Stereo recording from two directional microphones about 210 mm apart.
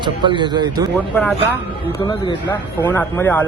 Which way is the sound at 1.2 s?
10° left (ahead or behind).